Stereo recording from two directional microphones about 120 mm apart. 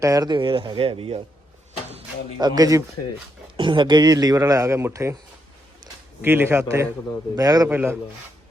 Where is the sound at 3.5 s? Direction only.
40° right (ahead or behind); by 5.1 s 25° right (ahead or behind).